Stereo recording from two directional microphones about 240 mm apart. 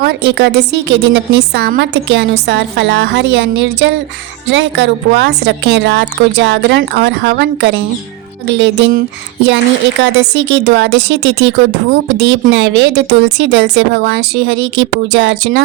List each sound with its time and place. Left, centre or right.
0.0 s a woman's voice: right
10.0 s a woman's voice: right